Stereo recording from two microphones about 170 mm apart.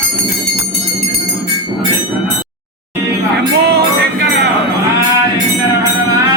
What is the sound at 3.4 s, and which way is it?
Music, 70° right (ahead or behind).